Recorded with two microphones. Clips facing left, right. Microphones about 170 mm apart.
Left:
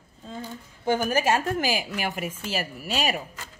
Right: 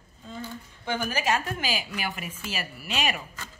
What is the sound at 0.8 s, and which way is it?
A woman's voice, 40° left (ahead or behind).